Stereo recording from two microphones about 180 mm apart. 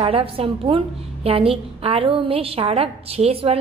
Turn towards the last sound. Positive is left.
turn(degrees=-35)  # may be behind; listen again after turning